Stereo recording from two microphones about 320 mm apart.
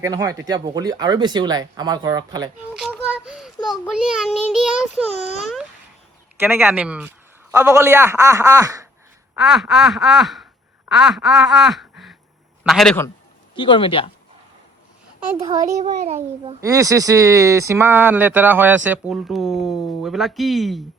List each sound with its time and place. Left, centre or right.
0.0 s speech: centre
2.7 s a child's voice: centre
6.4 s a child's voice: centre
10.8 s quack: centre
12.6 s a child's voice: centre
13.6 s speech: centre
15.4 s a child's voice: right; by 20.8 s centre